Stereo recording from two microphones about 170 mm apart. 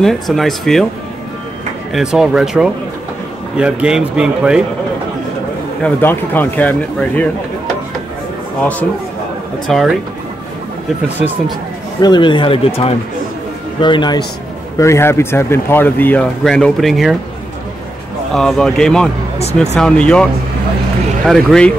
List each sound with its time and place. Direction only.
0.0 s speech: centre (ahead or behind)
1.9 s speech: centre (ahead or behind)
5.9 s speech: 10° left (ahead or behind)
9.7 s speech: centre (ahead or behind)
11.1 s speech: 10° right (ahead or behind)
12.0 s speech: 25° left (ahead or behind)
14.8 s speech: 15° left (ahead or behind); by 17.2 s centre (ahead or behind)
18.3 s speech: centre (ahead or behind)
19.3 s speech: 40° left (ahead or behind)
19.7 s speech: 5° left (ahead or behind)
21.3 s speech: 5° left (ahead or behind)